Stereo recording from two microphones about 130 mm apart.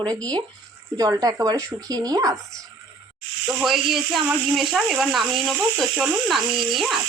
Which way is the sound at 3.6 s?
5° right (ahead or behind).